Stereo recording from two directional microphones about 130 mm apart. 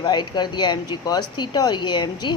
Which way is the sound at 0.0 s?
35° left (ahead or behind).